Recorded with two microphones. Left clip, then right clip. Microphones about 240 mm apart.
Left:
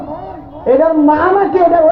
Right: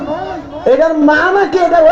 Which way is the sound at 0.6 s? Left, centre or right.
Right.